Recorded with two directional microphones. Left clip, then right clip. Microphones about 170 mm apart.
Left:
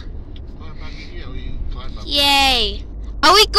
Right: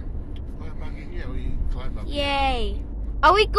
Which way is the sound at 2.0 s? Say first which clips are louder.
Left 9 dB; 5° left (ahead or behind).